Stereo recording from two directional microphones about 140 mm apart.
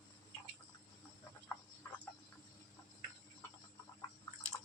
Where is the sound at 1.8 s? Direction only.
15° left (ahead or behind).